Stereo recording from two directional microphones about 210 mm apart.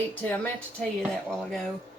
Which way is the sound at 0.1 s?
10° left (ahead or behind).